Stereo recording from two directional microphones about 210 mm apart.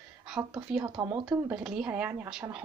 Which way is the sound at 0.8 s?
20° right (ahead or behind).